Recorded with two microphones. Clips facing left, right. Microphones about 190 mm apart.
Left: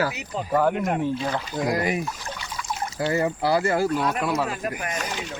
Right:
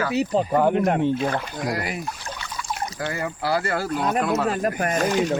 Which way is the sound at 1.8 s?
20° left (ahead or behind).